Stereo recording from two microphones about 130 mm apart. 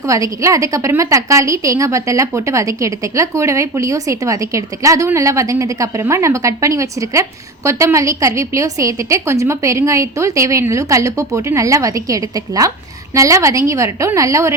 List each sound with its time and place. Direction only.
0.1 s a woman's voice: 25° right (ahead or behind)